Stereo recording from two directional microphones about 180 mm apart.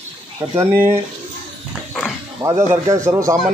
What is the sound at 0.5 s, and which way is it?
Speech, 15° right (ahead or behind).